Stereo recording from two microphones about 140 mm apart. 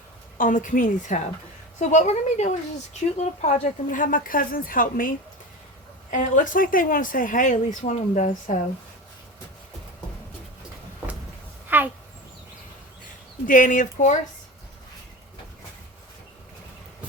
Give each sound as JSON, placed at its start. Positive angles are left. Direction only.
{"t": 0.3, "sound": "a woman's voice", "side_deg": 70}
{"t": 4.0, "sound": "a woman's voice", "side_deg": 80}
{"t": 6.1, "sound": "speech", "side_deg": 65}
{"t": 11.7, "sound": "a sound", "side_deg": -15}
{"t": 13.5, "sound": "speech", "side_deg": 70}